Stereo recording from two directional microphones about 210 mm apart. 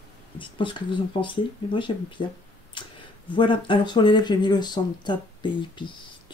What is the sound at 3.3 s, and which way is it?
Speech, 25° left (ahead or behind).